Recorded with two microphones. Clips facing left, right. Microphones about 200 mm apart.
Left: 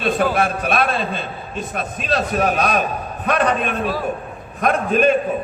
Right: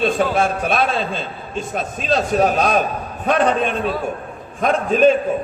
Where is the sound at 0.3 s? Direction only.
55° left (ahead or behind).